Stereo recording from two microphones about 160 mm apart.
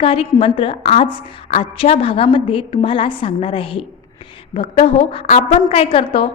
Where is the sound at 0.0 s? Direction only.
35° left (ahead or behind).